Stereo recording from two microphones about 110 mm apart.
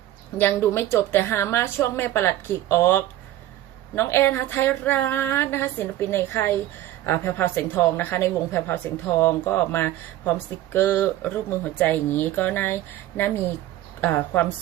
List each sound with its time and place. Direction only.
0.3 s speech: 20° left (ahead or behind)